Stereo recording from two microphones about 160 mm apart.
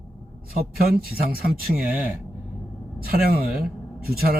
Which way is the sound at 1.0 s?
70° right (ahead or behind).